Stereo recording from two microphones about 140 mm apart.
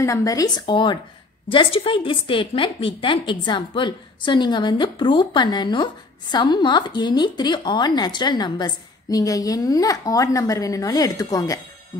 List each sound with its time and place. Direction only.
0.0 s a woman's voice: 25° left (ahead or behind)